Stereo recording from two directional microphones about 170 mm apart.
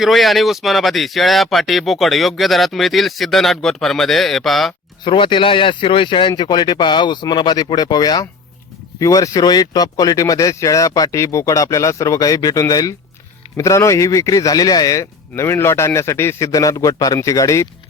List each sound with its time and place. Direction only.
0.0 s speech: centre (ahead or behind)
5.0 s speech: 30° left (ahead or behind)